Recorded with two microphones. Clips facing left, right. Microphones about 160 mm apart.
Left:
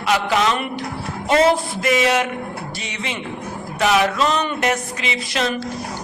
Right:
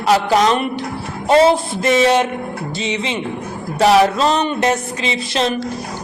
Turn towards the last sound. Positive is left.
turn(degrees=-30)  # may be behind; listen again after turning